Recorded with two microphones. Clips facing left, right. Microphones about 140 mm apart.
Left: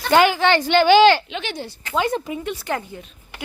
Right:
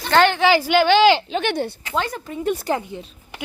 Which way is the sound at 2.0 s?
15° left (ahead or behind).